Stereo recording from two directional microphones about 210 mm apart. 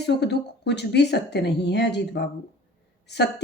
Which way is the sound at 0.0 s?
55° left (ahead or behind).